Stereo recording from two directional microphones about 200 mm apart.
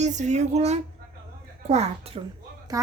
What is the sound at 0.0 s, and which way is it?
Speech, 35° right (ahead or behind).